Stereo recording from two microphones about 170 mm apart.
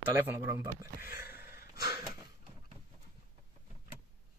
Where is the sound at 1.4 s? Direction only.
60° left (ahead or behind).